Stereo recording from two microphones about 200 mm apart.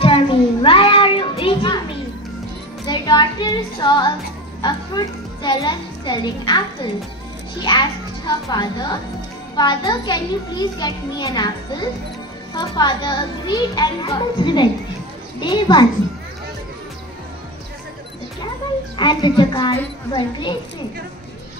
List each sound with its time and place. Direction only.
0.0 s a sound: 25° left (ahead or behind)
2.9 s a woman's voice: 20° left (ahead or behind)
12.5 s a child's voice: 20° left (ahead or behind)
18.9 s a child's voice: 25° left (ahead or behind)